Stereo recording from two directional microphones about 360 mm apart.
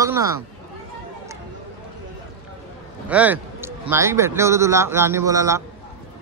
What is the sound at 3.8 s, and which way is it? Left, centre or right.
A man's voice, centre.